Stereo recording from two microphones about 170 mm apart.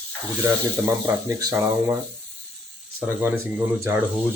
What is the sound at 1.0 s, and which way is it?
Speech, 20° right (ahead or behind).